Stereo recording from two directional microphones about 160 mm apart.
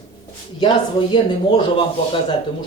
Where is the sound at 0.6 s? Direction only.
30° left (ahead or behind).